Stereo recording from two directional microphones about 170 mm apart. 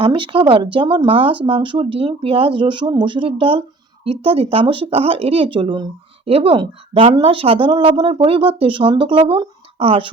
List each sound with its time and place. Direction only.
0.0 s speech: 30° right (ahead or behind)